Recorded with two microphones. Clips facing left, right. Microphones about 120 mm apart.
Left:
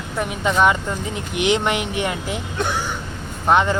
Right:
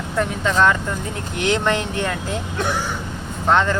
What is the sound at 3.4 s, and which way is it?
Speech, 15° left (ahead or behind).